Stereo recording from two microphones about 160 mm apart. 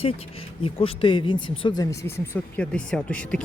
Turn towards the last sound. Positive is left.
turn(degrees=5)  # may be behind; listen again after turning